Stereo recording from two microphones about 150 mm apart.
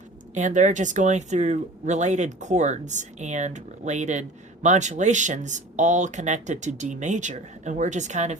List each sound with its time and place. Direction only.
0.3 s speech: 55° right (ahead or behind)